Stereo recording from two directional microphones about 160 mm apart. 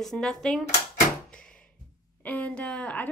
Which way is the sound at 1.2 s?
5° left (ahead or behind).